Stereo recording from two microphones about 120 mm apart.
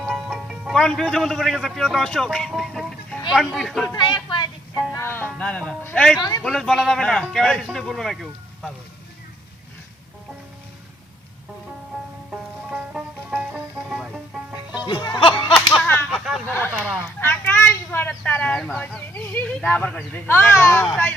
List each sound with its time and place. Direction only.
0.0 s music: 5° right (ahead or behind)
0.8 s a man's voice: 5° left (ahead or behind)
3.9 s speech: 40° left (ahead or behind)
4.9 s music: 20° left (ahead or behind)
5.4 s speech: 10° left (ahead or behind)
6.1 s speech: 35° left (ahead or behind)
6.4 s a man's voice: 5° left (ahead or behind)
12.3 s music: 10° right (ahead or behind)
14.8 s music: 35° left (ahead or behind)
15.5 s whip: centre (ahead or behind)
16.1 s vehicle: centre (ahead or behind)
16.5 s speech: 15° left (ahead or behind)
17.2 s a sound: 15° left (ahead or behind)
18.2 s speech: 10° left (ahead or behind)